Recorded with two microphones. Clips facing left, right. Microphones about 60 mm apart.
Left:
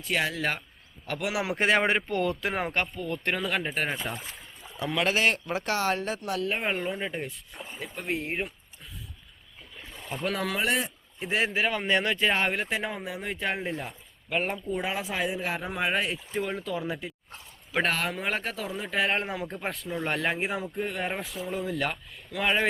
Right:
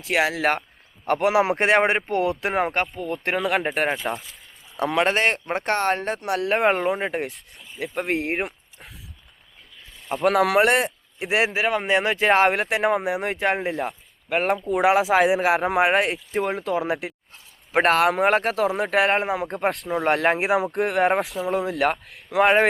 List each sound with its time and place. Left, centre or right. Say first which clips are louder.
0.0 s speech: right 7 dB; right
1.0 s speech: right 10 dB; right
1.5 s speech: right 5 dB; right
1.8 s speech: right 5 dB; right
2.3 s speech: right 6 dB; right
4.0 s speech: right 7 dB; right
4.8 s speech: right 5 dB; right
10.2 s speech: right 11 dB; right
11.6 s speech: right 5 dB; right
12.1 s speech: right 8 dB; right
17.8 s speech: right 15 dB; right
19.5 s speech: right 9 dB; right